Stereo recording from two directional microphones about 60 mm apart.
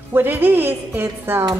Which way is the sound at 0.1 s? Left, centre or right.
Right.